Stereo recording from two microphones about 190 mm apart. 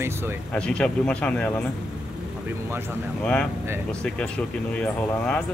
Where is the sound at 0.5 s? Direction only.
5° left (ahead or behind).